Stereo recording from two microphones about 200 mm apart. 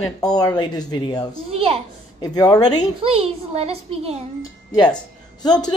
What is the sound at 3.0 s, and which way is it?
A child's voice, 30° right (ahead or behind).